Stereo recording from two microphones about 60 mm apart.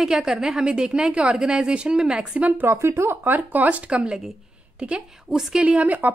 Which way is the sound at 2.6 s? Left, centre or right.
Right.